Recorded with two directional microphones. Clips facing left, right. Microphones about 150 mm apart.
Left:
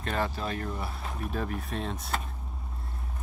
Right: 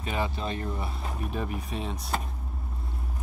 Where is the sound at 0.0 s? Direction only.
5° right (ahead or behind).